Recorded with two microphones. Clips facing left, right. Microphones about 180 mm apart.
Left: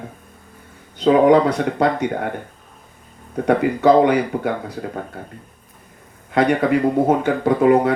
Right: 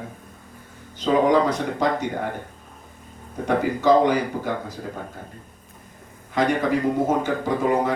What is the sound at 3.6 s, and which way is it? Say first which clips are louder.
Speech: left 3 dB; 65° left (ahead or behind).